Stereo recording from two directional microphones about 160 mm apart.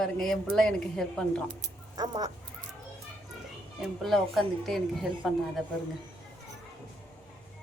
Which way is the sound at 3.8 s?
Centre (ahead or behind).